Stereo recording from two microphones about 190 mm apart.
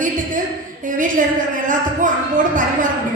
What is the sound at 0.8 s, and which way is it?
A woman's voice, 45° right (ahead or behind).